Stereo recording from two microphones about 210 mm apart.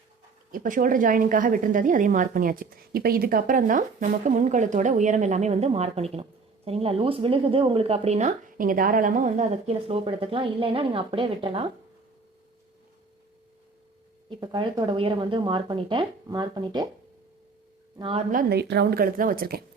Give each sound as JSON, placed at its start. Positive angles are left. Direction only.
{"t": 0.5, "sound": "a woman's voice", "side_deg": -40}
{"t": 14.3, "sound": "speech", "side_deg": -20}
{"t": 18.0, "sound": "speech", "side_deg": -25}
{"t": 18.3, "sound": "a woman's voice", "side_deg": -45}